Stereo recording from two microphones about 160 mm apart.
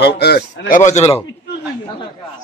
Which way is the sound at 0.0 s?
90° left.